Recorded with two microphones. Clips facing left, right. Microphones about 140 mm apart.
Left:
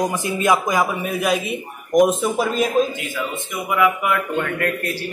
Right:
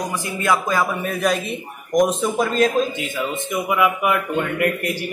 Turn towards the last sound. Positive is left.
turn(degrees=-20)  # may be behind; listen again after turning